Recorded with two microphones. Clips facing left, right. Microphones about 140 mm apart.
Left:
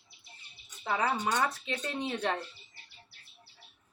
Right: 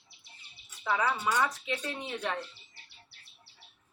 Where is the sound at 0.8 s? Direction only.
40° left (ahead or behind).